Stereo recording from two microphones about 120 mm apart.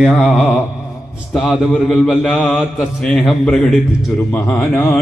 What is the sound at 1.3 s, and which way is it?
Mantra, centre (ahead or behind).